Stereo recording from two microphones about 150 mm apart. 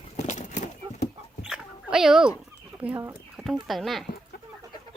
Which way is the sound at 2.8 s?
10° right (ahead or behind).